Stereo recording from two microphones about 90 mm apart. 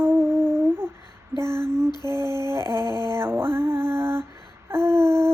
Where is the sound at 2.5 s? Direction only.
30° right (ahead or behind).